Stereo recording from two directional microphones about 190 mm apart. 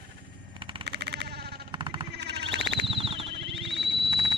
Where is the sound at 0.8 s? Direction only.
60° right (ahead or behind).